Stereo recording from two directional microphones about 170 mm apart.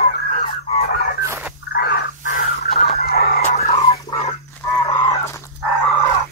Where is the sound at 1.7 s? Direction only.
70° left (ahead or behind).